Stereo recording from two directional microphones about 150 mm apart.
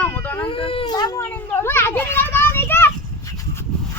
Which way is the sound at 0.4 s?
35° left (ahead or behind).